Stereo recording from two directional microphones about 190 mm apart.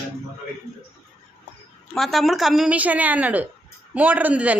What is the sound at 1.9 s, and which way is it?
A woman's voice, centre (ahead or behind).